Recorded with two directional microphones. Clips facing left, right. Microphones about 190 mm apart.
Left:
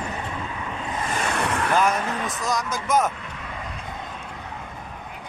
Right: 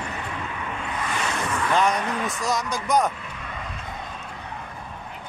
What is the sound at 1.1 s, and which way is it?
Vehicle, 45° left (ahead or behind).